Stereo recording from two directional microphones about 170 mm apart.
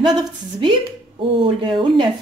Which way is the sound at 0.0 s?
25° right (ahead or behind).